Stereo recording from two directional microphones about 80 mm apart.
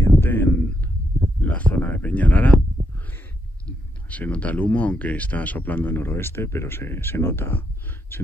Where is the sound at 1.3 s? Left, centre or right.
Centre.